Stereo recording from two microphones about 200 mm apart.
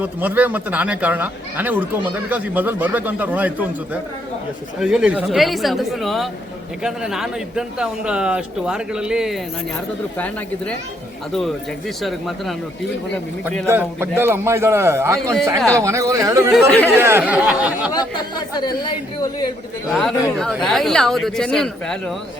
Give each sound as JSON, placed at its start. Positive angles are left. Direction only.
{"t": 0.0, "sound": "a man's voice", "side_deg": -10}
{"t": 10.2, "sound": "speech", "side_deg": 10}
{"t": 12.0, "sound": "a man's voice", "side_deg": 0}
{"t": 13.7, "sound": "speech", "side_deg": -10}
{"t": 16.5, "sound": "a man's voice", "side_deg": 5}
{"t": 16.9, "sound": "speech", "side_deg": -10}
{"t": 19.9, "sound": "a man's voice", "side_deg": 0}